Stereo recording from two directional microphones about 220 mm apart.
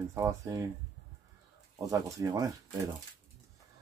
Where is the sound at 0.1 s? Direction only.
15° right (ahead or behind).